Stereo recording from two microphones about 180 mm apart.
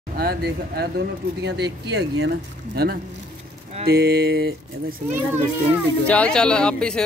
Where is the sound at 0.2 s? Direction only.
60° right (ahead or behind).